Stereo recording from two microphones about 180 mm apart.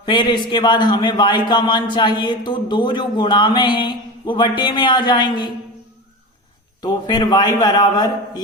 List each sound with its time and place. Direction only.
0.0 s a man's voice: 25° left (ahead or behind)
6.8 s a man's voice: 20° left (ahead or behind)